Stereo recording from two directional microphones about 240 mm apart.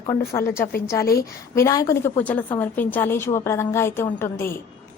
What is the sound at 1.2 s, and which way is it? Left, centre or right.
A woman's voice, centre.